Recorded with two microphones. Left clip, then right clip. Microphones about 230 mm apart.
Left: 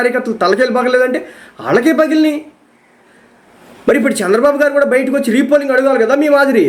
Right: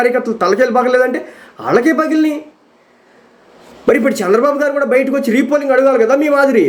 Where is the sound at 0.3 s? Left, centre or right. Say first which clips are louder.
Left 1 dB; centre.